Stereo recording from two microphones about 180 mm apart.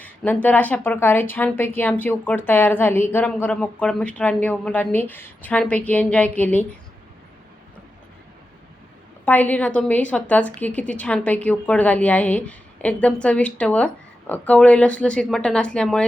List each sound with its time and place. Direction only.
0.0 s a woman's voice: 10° left (ahead or behind)
9.2 s a woman's voice: 10° left (ahead or behind)